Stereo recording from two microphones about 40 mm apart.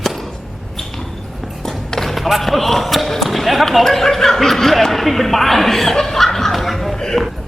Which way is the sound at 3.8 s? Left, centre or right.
Centre.